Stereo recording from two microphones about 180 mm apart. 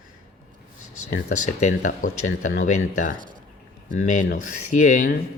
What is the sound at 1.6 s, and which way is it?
Speech, 45° left (ahead or behind).